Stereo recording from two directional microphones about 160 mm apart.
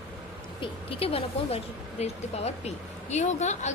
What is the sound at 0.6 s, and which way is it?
A woman's voice, 35° left (ahead or behind).